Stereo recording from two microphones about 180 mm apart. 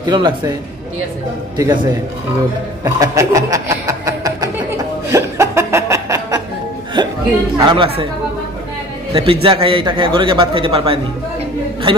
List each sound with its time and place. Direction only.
0.0 s a man's voice: 25° right (ahead or behind)
1.6 s a man's voice: 20° right (ahead or behind)
5.1 s chuckle: 15° right (ahead or behind)
7.0 s music: 25° right (ahead or behind)
7.6 s a man's voice: 25° right (ahead or behind)
9.1 s a man's voice: 30° right (ahead or behind)